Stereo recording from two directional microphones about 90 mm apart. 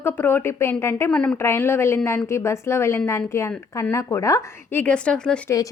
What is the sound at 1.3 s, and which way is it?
A woman's voice, 30° left (ahead or behind).